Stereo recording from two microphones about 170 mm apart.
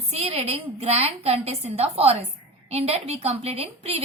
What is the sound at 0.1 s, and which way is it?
A woman's voice, 35° right (ahead or behind).